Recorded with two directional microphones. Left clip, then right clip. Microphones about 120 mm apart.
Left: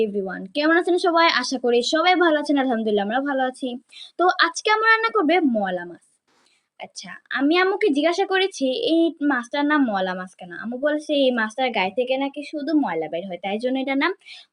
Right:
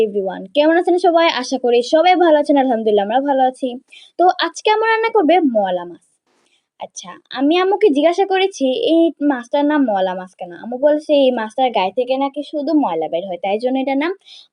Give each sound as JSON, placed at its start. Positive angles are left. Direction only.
{"t": 0.0, "sound": "speech", "side_deg": -30}
{"t": 7.1, "sound": "speech", "side_deg": -30}